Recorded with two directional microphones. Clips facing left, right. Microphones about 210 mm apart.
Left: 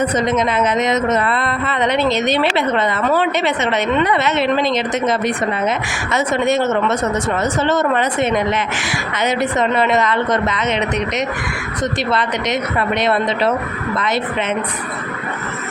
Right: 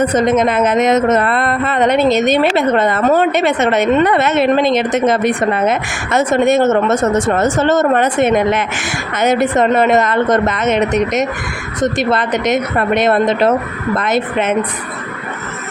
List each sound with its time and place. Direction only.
0.0 s speech: 50° right (ahead or behind)